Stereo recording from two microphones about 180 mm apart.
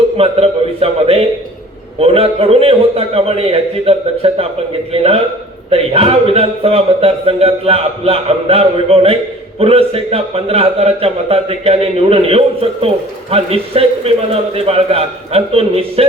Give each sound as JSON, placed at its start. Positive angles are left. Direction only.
{"t": 0.2, "sound": "a man's voice", "side_deg": -35}